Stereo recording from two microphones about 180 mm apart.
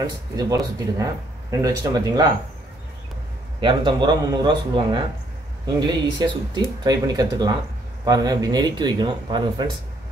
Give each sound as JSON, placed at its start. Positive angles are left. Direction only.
{"t": 0.0, "sound": "speech", "side_deg": -20}
{"t": 3.6, "sound": "speech", "side_deg": -25}